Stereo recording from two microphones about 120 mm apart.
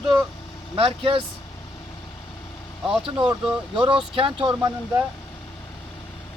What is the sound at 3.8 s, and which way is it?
Speech, 45° right (ahead or behind).